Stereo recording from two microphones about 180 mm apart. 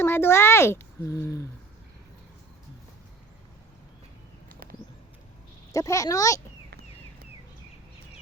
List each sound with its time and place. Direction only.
0.0 s a child's voice: 15° left (ahead or behind)
4.4 s a sound: 55° right (ahead or behind)
5.7 s a child's voice: 15° left (ahead or behind)